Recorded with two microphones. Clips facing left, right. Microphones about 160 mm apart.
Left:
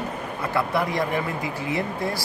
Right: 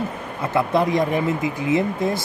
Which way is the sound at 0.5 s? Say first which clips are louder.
Right 5 dB; 20° right (ahead or behind).